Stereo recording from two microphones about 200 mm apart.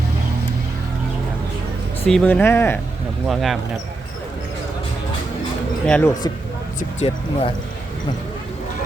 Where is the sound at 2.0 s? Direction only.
5° left (ahead or behind).